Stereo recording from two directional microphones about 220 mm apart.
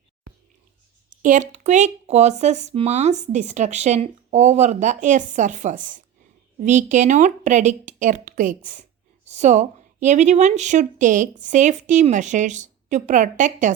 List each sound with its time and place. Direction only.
1.2 s speech: 35° right (ahead or behind)